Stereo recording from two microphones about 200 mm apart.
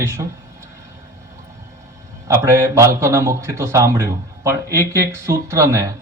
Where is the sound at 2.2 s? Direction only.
15° right (ahead or behind).